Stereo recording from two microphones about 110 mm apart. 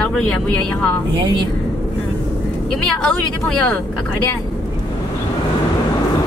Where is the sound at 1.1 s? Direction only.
45° right (ahead or behind).